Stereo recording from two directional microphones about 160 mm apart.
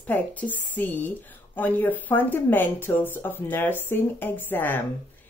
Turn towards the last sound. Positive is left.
turn(degrees=10)  # may be behind; listen again after turning